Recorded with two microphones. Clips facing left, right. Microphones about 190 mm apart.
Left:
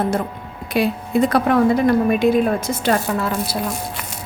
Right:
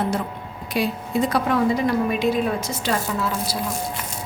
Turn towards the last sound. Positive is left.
turn(degrees=60)  # may be behind; listen again after turning